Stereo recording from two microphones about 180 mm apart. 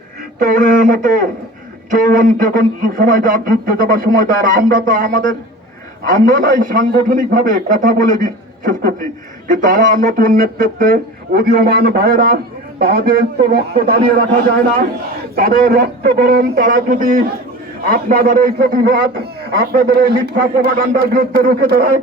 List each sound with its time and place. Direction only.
0.3 s a man's voice: 50° right (ahead or behind)
6.2 s a man's voice: 45° right (ahead or behind)
15.4 s a man's voice: 55° right (ahead or behind)